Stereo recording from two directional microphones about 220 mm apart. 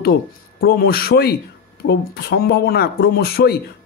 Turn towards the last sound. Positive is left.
turn(degrees=45)  # may be behind; listen again after turning